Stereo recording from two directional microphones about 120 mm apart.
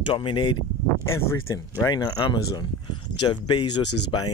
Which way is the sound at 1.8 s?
35° left (ahead or behind).